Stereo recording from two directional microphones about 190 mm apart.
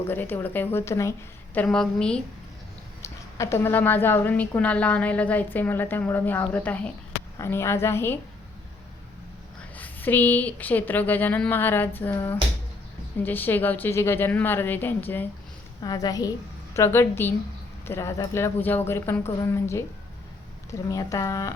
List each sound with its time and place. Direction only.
0.0 s a woman's voice: 10° left (ahead or behind)
1.5 s a woman's voice: 5° left (ahead or behind)
3.0 s a woman's voice: 15° left (ahead or behind)
9.7 s a woman's voice: 10° left (ahead or behind)